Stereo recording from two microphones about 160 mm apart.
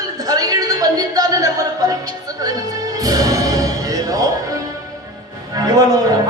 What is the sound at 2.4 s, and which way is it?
Music, 25° right (ahead or behind).